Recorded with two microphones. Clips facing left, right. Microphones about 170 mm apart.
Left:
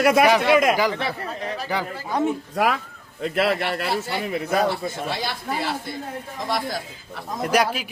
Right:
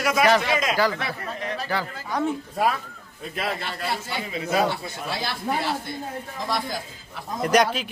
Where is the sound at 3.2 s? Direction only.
70° left (ahead or behind).